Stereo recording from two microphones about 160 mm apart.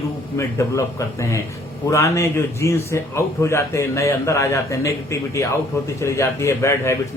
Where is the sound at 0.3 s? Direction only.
20° left (ahead or behind).